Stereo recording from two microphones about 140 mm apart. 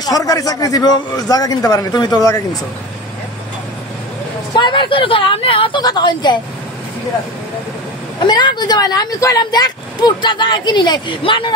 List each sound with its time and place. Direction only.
0.0 s a man's voice: 25° left (ahead or behind)
4.6 s speech: 35° left (ahead or behind)
8.2 s speech: 30° left (ahead or behind)